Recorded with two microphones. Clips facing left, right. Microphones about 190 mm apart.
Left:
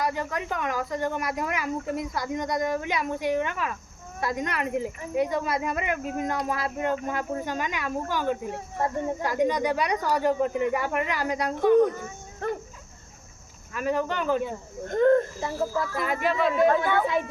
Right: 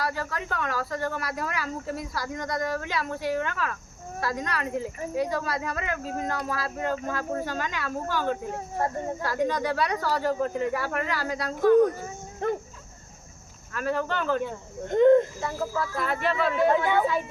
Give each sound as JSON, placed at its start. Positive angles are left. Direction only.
{"t": 0.0, "sound": "speech", "side_deg": 20}
{"t": 12.4, "sound": "speech", "side_deg": -20}
{"t": 13.7, "sound": "speech", "side_deg": 15}
{"t": 14.8, "sound": "speech", "side_deg": -20}
{"t": 16.0, "sound": "speech", "side_deg": 10}
{"t": 16.7, "sound": "speech", "side_deg": -15}